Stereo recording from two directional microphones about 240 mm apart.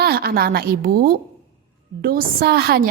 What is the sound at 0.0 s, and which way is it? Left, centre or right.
A woman's voice, right.